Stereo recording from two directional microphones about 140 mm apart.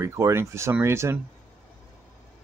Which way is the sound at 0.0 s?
20° right (ahead or behind).